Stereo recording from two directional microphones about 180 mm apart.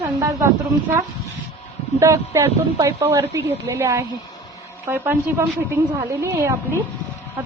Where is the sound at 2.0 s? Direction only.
15° right (ahead or behind).